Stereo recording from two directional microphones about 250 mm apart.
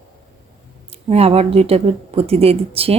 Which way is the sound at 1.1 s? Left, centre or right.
Right.